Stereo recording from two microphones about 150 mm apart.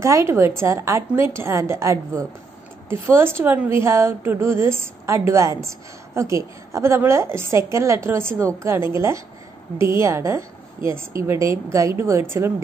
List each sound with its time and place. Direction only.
0.0 s a woman's voice: 20° right (ahead or behind)